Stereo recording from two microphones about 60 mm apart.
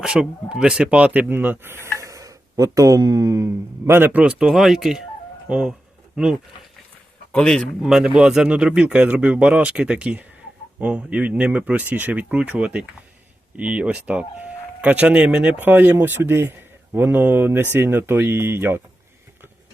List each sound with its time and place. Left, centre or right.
0.2 s speech: centre
1.3 s speech: right
2.0 s a sound: right
3.8 s speech: right
4.1 s speech: right
4.4 s speech: centre
5.5 s speech: centre
7.3 s speech: centre
7.8 s speech: centre
8.0 s speech: centre; by 18.8 s right